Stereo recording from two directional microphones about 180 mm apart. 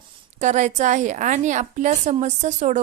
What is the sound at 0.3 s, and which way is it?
A woman's voice, 40° right (ahead or behind).